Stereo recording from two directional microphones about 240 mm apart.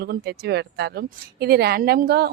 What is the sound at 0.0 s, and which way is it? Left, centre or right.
A woman's voice, right.